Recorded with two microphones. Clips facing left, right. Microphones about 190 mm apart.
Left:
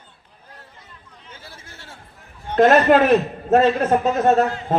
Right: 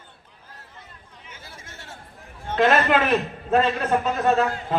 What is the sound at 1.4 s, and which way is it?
Chatter, 30° left (ahead or behind).